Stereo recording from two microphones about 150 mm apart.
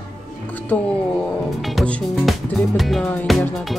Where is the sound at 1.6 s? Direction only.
Centre (ahead or behind).